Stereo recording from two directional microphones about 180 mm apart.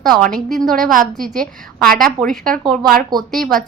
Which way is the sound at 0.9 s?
50° right (ahead or behind).